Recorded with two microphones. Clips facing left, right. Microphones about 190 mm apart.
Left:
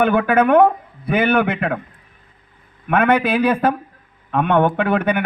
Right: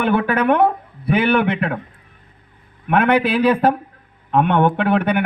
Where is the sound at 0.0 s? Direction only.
50° left (ahead or behind).